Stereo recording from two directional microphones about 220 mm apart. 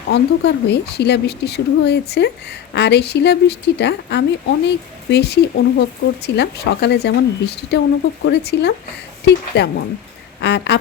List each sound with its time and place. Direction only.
0.1 s a woman's voice: 50° left (ahead or behind)